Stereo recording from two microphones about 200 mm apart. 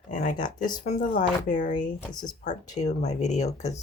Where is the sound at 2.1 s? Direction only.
20° left (ahead or behind).